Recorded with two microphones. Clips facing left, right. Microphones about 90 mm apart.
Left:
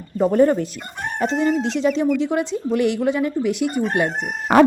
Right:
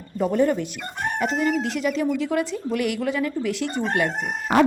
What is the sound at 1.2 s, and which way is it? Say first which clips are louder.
A woman's voice: left 4 dB; 25° left (ahead or behind).